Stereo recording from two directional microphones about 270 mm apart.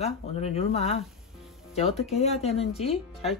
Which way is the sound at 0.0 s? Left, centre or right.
Left.